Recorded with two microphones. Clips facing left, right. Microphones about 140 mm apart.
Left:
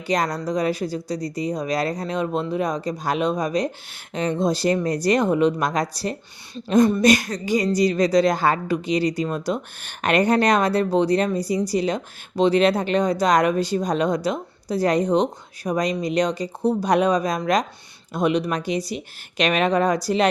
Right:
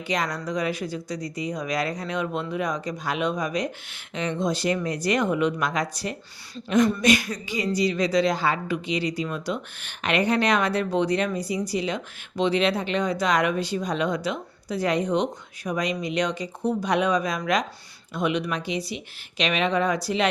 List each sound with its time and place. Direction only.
0.1 s speech: 35° left (ahead or behind)